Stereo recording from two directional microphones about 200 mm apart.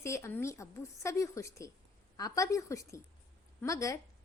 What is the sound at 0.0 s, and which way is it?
A woman's voice, 15° left (ahead or behind).